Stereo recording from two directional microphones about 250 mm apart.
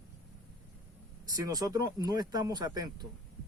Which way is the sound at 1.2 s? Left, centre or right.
Centre.